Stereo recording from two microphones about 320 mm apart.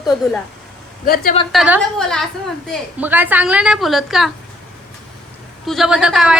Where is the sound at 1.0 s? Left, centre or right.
Left.